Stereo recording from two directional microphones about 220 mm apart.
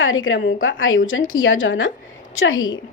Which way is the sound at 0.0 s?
60° left (ahead or behind).